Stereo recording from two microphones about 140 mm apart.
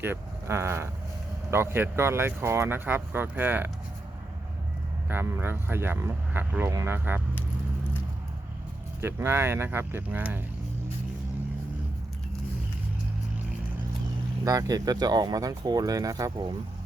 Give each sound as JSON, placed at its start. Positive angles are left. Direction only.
{"t": 0.0, "sound": "speech", "side_deg": -15}
{"t": 5.0, "sound": "speech", "side_deg": -15}
{"t": 9.0, "sound": "speech", "side_deg": -15}
{"t": 14.4, "sound": "speech", "side_deg": -25}